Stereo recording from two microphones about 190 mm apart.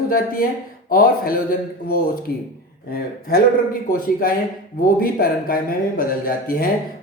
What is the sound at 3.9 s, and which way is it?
Speech, 50° left (ahead or behind).